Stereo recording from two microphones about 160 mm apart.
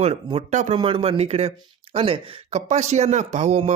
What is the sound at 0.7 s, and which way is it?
Speech, 35° right (ahead or behind).